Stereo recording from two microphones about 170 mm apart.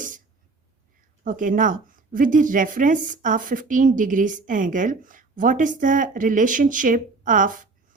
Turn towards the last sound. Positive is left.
turn(degrees=-50)  # may be behind; listen again after turning